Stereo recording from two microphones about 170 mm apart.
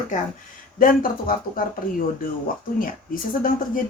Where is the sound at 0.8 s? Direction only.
55° left (ahead or behind).